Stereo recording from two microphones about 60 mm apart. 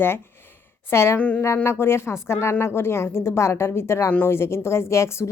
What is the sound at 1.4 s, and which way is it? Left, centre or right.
Speech, left.